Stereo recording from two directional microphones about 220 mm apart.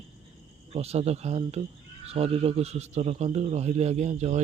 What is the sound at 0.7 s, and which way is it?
A man's voice, 30° right (ahead or behind).